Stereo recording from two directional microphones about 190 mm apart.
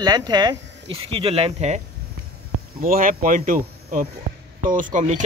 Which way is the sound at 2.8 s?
45° right (ahead or behind).